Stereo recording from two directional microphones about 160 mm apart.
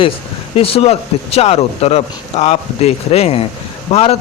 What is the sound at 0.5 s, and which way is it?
Speech, 35° left (ahead or behind).